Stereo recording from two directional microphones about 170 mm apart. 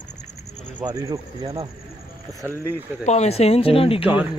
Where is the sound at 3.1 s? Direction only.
40° left (ahead or behind).